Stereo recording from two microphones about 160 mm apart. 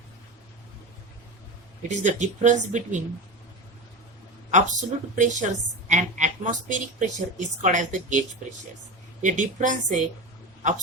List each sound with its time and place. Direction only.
1.9 s a woman's voice: 50° right (ahead or behind)
4.5 s a woman's voice: 50° right (ahead or behind)
9.2 s a woman's voice: 50° right (ahead or behind)